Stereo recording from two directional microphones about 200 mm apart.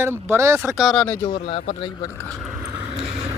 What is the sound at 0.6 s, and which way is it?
Speech, centre (ahead or behind).